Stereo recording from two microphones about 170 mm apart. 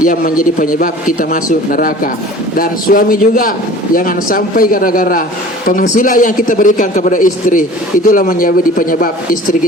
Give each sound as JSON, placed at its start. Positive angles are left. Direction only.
{"t": 0.0, "sound": "a man's voice", "side_deg": 55}